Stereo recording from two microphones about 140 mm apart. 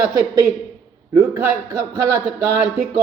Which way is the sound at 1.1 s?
20° right (ahead or behind).